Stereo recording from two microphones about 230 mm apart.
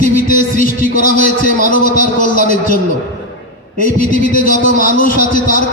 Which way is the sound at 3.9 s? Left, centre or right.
Left.